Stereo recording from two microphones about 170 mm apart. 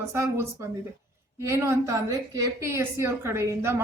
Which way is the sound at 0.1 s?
15° right (ahead or behind).